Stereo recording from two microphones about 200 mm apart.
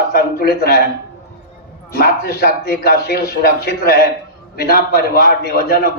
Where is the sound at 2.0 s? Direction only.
50° left (ahead or behind).